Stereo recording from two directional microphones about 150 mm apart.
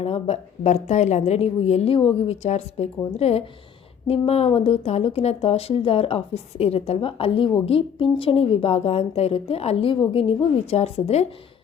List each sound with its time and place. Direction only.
0.0 s a woman's voice: 45° left (ahead or behind)